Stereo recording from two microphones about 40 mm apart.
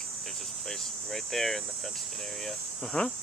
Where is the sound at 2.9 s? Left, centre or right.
Centre.